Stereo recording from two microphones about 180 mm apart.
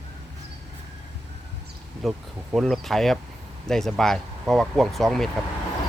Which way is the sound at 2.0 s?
Centre (ahead or behind).